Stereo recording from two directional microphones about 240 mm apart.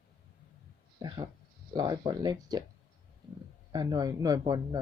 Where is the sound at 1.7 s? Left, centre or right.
Centre.